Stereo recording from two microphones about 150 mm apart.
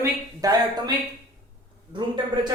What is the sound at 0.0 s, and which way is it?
A man's voice, 25° right (ahead or behind).